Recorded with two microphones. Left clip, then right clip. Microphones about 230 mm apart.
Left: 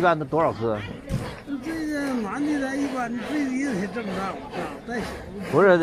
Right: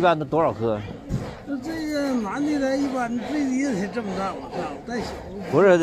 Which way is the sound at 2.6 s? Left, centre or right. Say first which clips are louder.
Right 3 dB; right.